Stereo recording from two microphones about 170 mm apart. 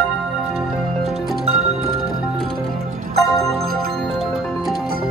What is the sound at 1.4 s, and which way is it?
Music, 40° right (ahead or behind).